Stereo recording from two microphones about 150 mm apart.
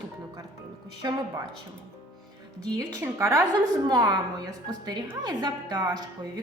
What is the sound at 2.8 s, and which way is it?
A woman's voice, 15° right (ahead or behind).